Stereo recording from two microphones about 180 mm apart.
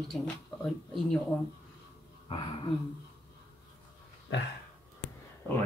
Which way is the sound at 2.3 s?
25° left (ahead or behind).